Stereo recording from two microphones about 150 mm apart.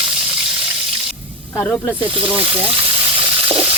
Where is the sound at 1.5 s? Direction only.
10° left (ahead or behind).